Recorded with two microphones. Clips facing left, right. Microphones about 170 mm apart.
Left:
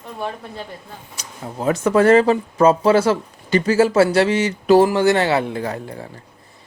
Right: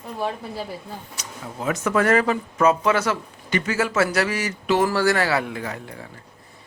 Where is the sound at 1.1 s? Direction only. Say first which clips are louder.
Left 3 dB; 35° left (ahead or behind).